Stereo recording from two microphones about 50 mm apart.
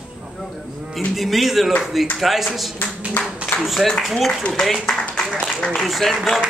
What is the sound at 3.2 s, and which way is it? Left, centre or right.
Speech, left.